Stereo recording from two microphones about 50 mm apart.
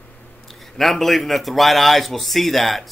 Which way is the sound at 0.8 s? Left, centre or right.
Centre.